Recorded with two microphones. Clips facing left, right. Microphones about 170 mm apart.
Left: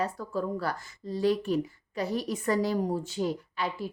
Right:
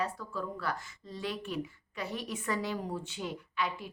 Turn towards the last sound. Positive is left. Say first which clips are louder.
# left 3 dB
turn(degrees=35)  # may be behind; listen again after turning